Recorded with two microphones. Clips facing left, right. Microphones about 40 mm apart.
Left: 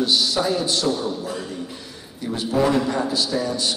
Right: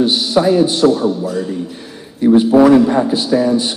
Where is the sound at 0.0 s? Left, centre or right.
Right.